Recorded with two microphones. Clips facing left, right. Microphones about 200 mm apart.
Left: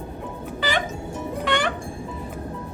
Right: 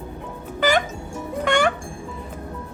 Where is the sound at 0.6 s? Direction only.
45° right (ahead or behind).